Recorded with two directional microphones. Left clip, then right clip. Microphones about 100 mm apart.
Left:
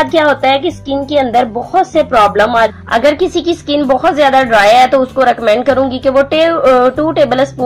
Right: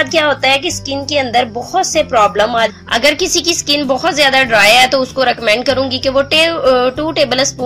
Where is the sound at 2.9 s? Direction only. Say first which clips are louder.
Left 2 dB; 25° right (ahead or behind).